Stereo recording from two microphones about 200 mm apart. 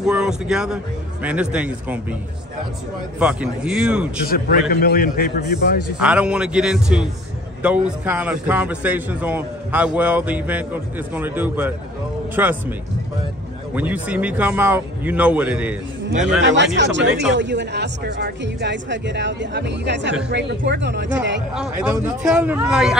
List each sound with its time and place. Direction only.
0.0 s a man's voice: 5° right (ahead or behind)
3.2 s speech: 5° right (ahead or behind)
4.3 s a man's voice: 50° left (ahead or behind)
5.9 s a man's voice: 5° right (ahead or behind)
13.7 s a man's voice: 10° right (ahead or behind)
16.4 s speech: 65° right (ahead or behind)
21.5 s speech: 5° right (ahead or behind)